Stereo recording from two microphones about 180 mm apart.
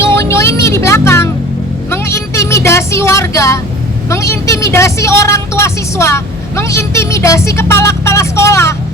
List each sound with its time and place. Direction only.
0.0 s music: 15° left (ahead or behind)
4.1 s speech: 15° left (ahead or behind)